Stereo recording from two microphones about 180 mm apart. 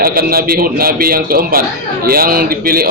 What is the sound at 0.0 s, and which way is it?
A man's voice, 55° right (ahead or behind).